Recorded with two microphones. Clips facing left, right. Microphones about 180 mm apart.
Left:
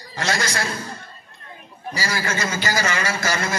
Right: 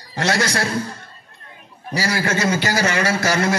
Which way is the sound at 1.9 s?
65° right (ahead or behind).